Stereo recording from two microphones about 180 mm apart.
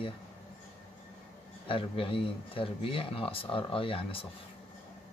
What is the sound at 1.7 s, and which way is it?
A man's voice, 30° left (ahead or behind).